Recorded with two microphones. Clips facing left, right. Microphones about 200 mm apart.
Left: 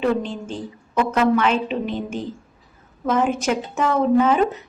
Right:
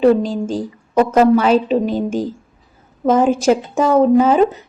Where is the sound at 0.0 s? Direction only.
35° right (ahead or behind).